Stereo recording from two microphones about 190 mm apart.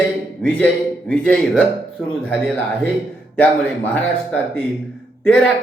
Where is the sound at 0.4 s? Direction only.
5° left (ahead or behind).